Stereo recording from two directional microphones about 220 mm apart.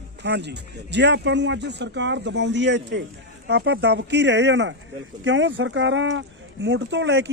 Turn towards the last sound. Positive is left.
turn(degrees=-55)  # may be behind; listen again after turning